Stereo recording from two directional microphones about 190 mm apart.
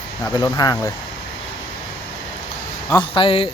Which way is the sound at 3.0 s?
25° left (ahead or behind).